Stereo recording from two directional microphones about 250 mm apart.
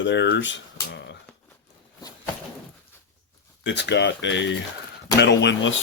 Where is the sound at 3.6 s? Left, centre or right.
Left.